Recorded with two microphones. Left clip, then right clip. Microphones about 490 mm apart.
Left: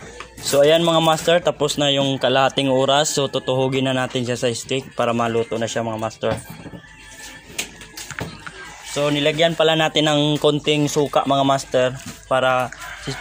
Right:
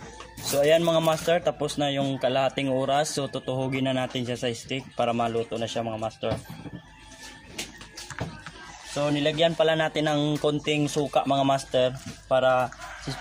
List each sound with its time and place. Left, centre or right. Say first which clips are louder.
0.5 s speech: left 6 dB; right
8.9 s speech: left 6 dB; right